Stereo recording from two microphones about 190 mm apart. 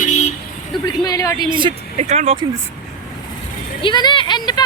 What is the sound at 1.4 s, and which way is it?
Speech, 25° right (ahead or behind).